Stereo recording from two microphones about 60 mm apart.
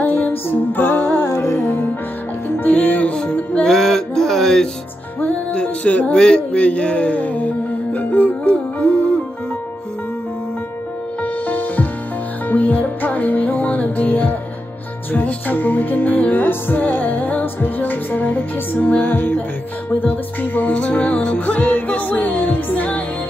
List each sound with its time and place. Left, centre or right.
0.0 s music: left
1.2 s music: left
2.7 s music: left
3.6 s music: centre
5.2 s music: centre
11.4 s music: left